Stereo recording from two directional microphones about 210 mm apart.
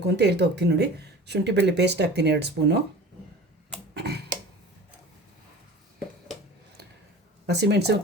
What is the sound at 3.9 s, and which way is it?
Tick-tock, 50° right (ahead or behind).